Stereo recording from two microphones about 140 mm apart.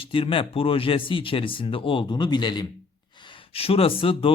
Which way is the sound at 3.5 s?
45° left (ahead or behind).